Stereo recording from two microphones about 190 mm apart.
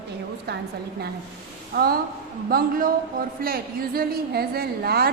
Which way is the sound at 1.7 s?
50° right (ahead or behind).